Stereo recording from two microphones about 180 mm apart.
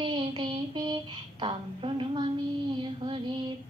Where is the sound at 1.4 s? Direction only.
30° right (ahead or behind).